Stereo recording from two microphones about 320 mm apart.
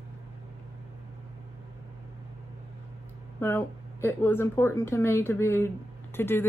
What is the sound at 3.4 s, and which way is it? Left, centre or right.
Speech, centre.